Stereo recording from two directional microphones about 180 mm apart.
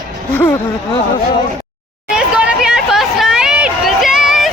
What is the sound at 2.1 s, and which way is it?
Hubbub, 5° right (ahead or behind).